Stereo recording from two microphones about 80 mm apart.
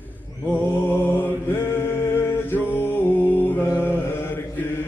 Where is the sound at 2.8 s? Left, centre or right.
Left.